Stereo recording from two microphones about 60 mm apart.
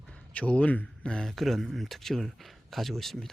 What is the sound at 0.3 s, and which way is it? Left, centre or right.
Speech, left.